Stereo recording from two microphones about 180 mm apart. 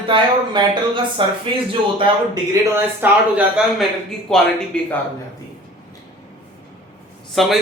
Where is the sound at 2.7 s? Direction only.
10° right (ahead or behind).